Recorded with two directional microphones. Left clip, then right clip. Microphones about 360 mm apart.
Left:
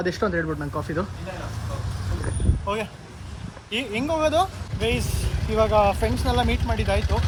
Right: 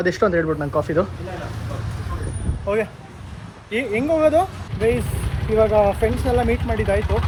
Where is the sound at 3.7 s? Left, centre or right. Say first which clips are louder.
Right 5 dB; centre.